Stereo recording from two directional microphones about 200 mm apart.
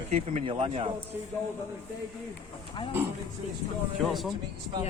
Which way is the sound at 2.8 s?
25° left (ahead or behind).